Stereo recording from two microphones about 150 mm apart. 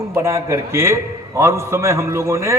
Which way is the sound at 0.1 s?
20° right (ahead or behind).